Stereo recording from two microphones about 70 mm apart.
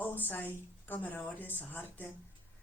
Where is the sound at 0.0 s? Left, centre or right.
Left.